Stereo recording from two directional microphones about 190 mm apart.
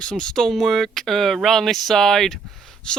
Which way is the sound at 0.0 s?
5° left (ahead or behind).